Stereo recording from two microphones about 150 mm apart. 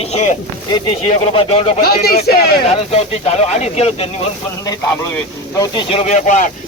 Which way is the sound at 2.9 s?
45° left (ahead or behind).